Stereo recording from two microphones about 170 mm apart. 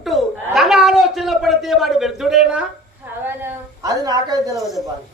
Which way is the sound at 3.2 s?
15° right (ahead or behind).